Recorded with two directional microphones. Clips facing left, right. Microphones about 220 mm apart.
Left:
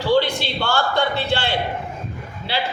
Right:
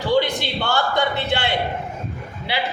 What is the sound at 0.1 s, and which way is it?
A man's voice, 15° right (ahead or behind).